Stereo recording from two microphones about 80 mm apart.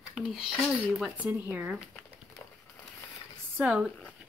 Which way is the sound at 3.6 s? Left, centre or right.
Centre.